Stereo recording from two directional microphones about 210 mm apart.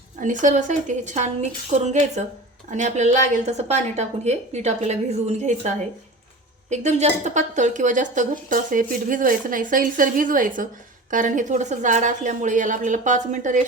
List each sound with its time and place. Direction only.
0.2 s speech: 35° right (ahead or behind)